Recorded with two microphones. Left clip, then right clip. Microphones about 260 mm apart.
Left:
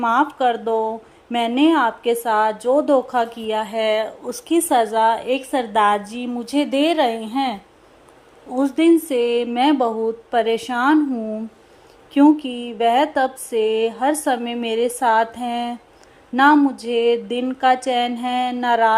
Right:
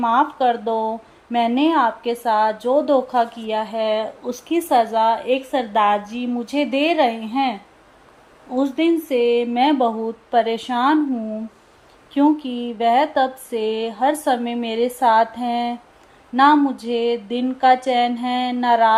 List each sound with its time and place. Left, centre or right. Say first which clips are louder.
0.0 s speech: even; left
0.6 s speech: left 1 dB; left
1.3 s speech: left 1 dB; left
8.5 s speech: left 3 dB; centre
12.6 s speech: even; left